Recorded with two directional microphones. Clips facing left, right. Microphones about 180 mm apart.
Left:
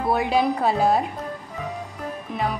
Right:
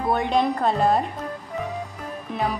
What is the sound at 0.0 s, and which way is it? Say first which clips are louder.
Speech: even; 5° left (ahead or behind).